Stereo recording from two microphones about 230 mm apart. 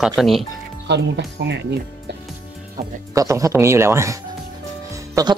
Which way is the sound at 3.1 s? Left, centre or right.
Centre.